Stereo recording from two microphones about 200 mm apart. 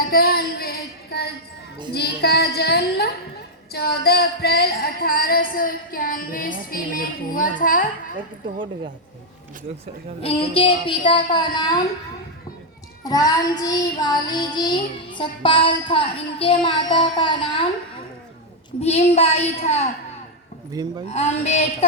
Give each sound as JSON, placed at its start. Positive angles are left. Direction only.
{"t": 0.0, "sound": "a sound", "side_deg": 50}
{"t": 1.9, "sound": "female singing", "side_deg": 55}
{"t": 10.2, "sound": "child singing", "side_deg": 30}
{"t": 13.1, "sound": "child singing", "side_deg": 20}
{"t": 18.8, "sound": "a woman's voice", "side_deg": 30}
{"t": 20.8, "sound": "speech", "side_deg": -20}
{"t": 21.1, "sound": "a woman's voice", "side_deg": 35}